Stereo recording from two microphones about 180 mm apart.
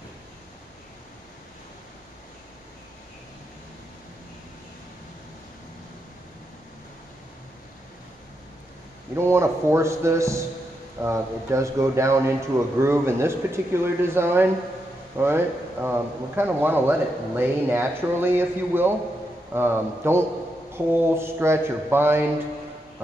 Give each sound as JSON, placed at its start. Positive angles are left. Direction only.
{"t": 9.1, "sound": "a man's voice", "side_deg": -15}